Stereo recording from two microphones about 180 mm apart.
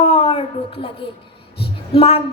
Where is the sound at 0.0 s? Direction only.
35° left (ahead or behind).